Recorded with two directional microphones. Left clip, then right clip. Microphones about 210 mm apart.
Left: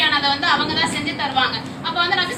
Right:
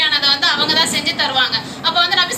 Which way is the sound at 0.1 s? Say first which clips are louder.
Right 3 dB; 50° right (ahead or behind).